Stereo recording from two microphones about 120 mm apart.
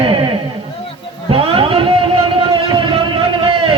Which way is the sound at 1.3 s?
50° right (ahead or behind).